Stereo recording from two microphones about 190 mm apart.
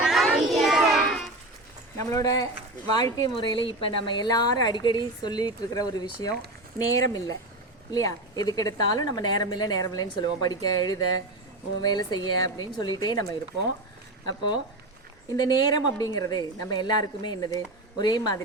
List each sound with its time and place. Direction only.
0.0 s child singing: centre (ahead or behind)
2.0 s a woman's voice: 15° left (ahead or behind)
14.3 s a woman's voice: 20° left (ahead or behind)